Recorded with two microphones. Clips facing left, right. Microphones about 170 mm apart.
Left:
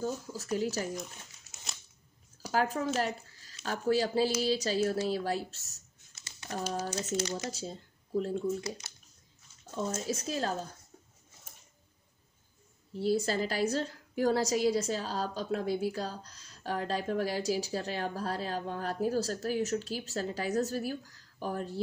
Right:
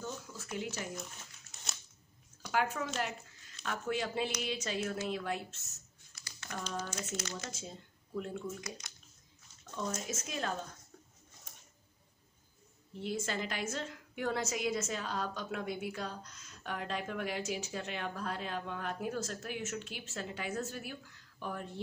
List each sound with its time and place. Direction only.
0.0 s speech: 35° left (ahead or behind)
1.5 s a sound: centre (ahead or behind)
2.5 s a woman's voice: 35° left (ahead or behind)
3.0 s a sound: 35° left (ahead or behind)
3.6 s a woman's voice: 35° left (ahead or behind)
6.1 s typing: 25° left (ahead or behind)
6.9 s a woman's voice: 35° left (ahead or behind)
9.8 s a woman's voice: 30° left (ahead or behind)
13.0 s a woman's voice: 35° left (ahead or behind)